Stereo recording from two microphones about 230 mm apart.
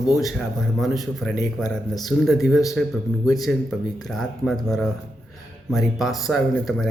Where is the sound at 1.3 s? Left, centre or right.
Centre.